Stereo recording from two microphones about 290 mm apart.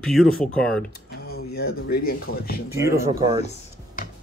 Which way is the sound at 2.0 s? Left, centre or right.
Left.